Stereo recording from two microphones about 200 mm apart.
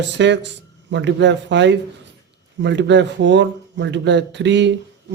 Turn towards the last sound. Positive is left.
turn(degrees=-60)  # may be behind; listen again after turning